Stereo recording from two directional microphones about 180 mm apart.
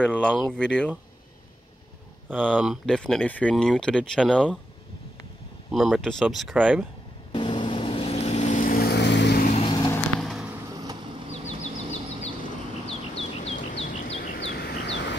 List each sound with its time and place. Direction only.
0.0 s speech: 5° left (ahead or behind)
2.5 s speech: centre (ahead or behind)
5.7 s speech: centre (ahead or behind)
7.3 s vehicle: 25° left (ahead or behind); by 9.4 s 75° left (ahead or behind)
9.4 s vehicle: 40° left (ahead or behind)
10.7 s vehicle: 20° right (ahead or behind)
11.4 s bird: 40° left (ahead or behind)
14.4 s bird: 65° left (ahead or behind)